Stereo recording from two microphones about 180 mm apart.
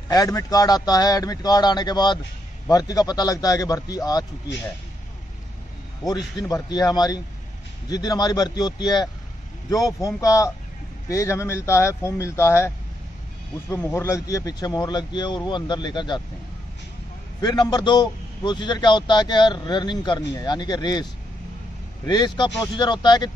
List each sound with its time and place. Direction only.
0.1 s a man's voice: 20° left (ahead or behind)
6.0 s a man's voice: 20° left (ahead or behind)
17.4 s a man's voice: 20° left (ahead or behind)